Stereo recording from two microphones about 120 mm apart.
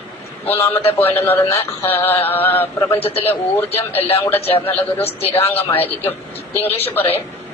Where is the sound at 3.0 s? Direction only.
50° left (ahead or behind).